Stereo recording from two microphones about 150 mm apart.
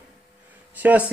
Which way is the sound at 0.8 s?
10° right (ahead or behind).